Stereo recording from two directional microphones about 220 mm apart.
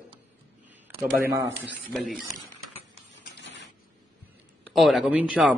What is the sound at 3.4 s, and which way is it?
Mechanisms, 50° left (ahead or behind).